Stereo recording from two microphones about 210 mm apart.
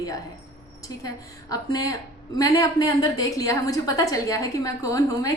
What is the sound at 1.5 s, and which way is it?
A woman's voice, 15° left (ahead or behind).